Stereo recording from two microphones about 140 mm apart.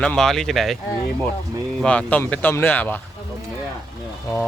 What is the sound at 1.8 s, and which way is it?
Speech, 5° left (ahead or behind).